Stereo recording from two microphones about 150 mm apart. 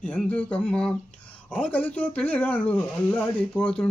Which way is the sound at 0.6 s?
5° left (ahead or behind).